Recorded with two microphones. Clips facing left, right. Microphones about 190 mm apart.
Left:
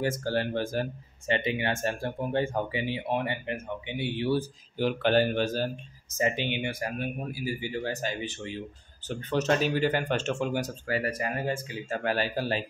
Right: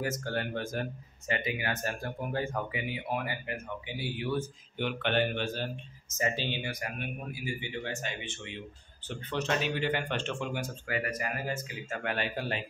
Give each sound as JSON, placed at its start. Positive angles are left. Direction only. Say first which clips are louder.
{"t": 0.0, "sound": "speech", "louder": "left 5 dB", "side_deg": 30}
{"t": 6.3, "sound": "speech", "louder": "left 4 dB", "side_deg": 20}
{"t": 6.7, "sound": "speech", "louder": "left 5 dB", "side_deg": 35}